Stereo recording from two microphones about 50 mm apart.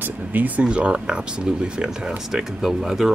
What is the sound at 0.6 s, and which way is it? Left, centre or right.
Speech, right.